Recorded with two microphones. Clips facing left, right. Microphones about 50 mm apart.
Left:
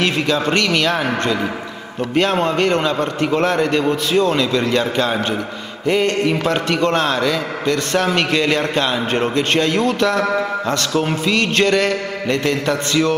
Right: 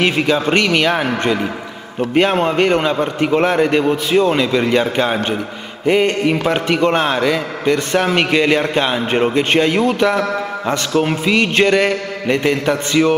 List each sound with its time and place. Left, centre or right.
0.0 s a man's voice: centre